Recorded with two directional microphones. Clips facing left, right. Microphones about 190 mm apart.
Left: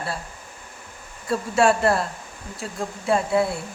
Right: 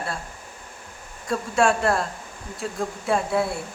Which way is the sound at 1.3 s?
Centre (ahead or behind).